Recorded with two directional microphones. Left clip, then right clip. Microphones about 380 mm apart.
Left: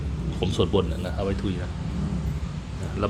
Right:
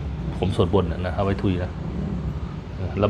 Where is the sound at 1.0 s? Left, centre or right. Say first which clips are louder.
Right 4 dB; centre.